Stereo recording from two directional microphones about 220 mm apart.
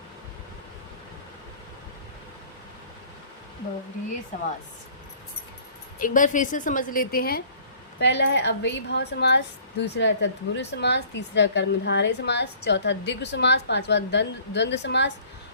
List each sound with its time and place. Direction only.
4.3 s a woman's voice: 35° left (ahead or behind)
6.0 s a woman's voice: 35° left (ahead or behind); by 15.1 s 50° left (ahead or behind)